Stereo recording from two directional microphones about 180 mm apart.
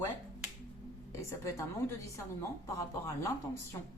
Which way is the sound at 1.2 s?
15° left (ahead or behind).